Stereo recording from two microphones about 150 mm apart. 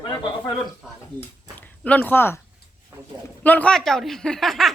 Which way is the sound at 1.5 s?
10° left (ahead or behind).